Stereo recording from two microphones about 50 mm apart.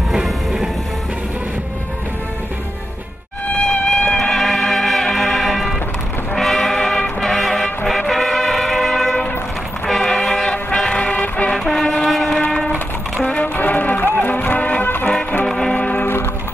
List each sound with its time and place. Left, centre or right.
0.1 s music: centre
3.6 s music: centre
10.0 s a sound: centre
10.9 s music: left
11.5 s vehicle: centre
11.8 s train: left
12.1 s train: centre
12.6 s music: left
13.6 s run: left
14.2 s music: left
15.4 s music: centre
15.7 s music: left
16.0 s music: left